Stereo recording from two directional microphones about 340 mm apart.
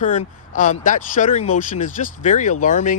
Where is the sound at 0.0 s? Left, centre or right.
Left.